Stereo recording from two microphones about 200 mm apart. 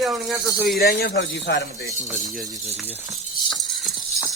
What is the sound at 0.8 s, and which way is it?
A man's voice, 50° left (ahead or behind).